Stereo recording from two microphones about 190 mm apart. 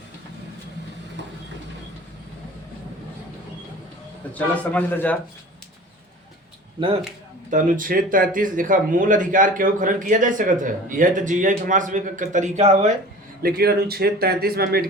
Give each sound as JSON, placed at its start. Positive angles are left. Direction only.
{"t": 4.4, "sound": "a man's voice", "side_deg": 10}
{"t": 7.5, "sound": "speech", "side_deg": -45}
{"t": 13.4, "sound": "speech", "side_deg": -55}